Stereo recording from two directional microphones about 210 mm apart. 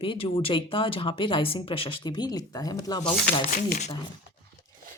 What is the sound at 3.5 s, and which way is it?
Speech, 35° left (ahead or behind).